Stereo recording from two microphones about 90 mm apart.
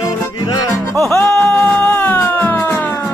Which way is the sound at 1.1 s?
30° left (ahead or behind).